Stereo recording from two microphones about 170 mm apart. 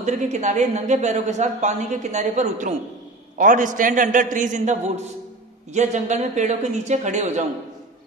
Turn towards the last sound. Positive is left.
turn(degrees=-40)  # may be behind; listen again after turning